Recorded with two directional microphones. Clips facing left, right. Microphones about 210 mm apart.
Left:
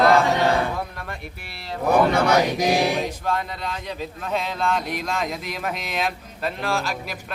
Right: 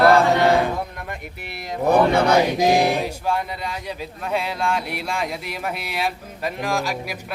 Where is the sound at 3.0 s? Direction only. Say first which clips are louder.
Right 2 dB; 10° right (ahead or behind).